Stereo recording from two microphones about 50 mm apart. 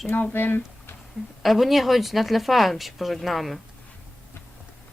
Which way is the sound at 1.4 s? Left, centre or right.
Centre.